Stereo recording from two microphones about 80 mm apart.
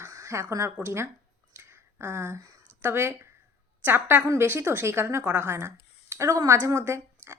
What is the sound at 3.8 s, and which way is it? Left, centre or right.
A woman's voice, right.